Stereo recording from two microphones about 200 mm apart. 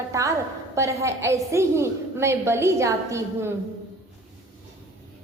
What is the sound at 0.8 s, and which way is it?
A woman's voice, 15° right (ahead or behind).